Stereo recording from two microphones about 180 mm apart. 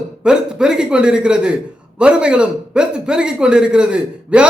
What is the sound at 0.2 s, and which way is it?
A man's voice, 5° right (ahead or behind).